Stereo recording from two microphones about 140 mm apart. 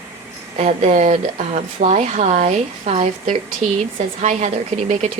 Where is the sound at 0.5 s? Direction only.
50° right (ahead or behind).